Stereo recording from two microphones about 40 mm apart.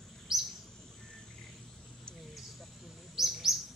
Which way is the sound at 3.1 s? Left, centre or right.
Centre.